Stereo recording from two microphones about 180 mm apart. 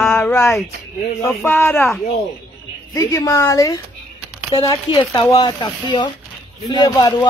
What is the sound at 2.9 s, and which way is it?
Speech, 15° left (ahead or behind).